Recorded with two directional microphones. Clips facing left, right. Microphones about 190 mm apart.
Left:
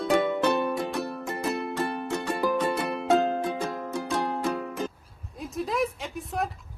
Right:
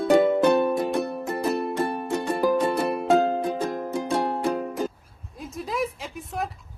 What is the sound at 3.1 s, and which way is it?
Music, 15° right (ahead or behind).